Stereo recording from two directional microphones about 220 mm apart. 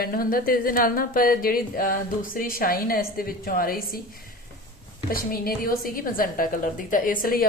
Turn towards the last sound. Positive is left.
turn(degrees=40)  # may be behind; listen again after turning